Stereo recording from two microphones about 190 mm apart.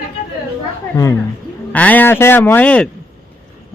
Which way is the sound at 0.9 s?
15° left (ahead or behind).